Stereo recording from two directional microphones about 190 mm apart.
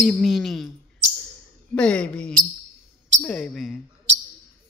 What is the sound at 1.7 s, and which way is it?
A woman's voice, 5° left (ahead or behind).